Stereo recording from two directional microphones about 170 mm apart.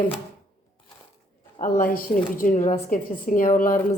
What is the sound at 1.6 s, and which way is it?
A woman's voice, 55° left (ahead or behind).